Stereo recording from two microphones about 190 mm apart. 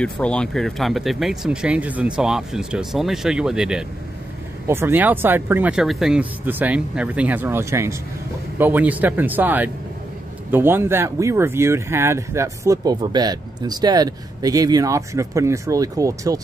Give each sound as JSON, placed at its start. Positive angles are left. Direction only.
{"t": 0.0, "sound": "speech", "side_deg": 5}